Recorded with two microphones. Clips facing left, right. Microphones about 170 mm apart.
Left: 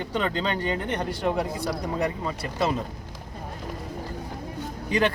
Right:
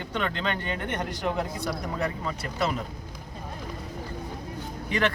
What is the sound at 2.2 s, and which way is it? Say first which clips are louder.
Speech: left 2 dB; 30° left (ahead or behind).